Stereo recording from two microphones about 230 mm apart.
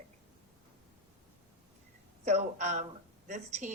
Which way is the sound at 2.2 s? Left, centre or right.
Right.